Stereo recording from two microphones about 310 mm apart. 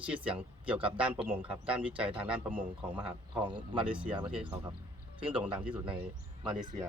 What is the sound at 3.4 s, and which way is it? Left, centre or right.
Speech, centre.